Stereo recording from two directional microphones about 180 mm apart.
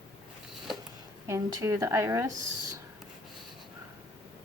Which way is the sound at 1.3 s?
15° right (ahead or behind).